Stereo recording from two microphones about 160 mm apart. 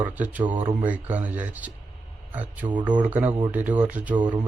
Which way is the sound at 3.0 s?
10° right (ahead or behind).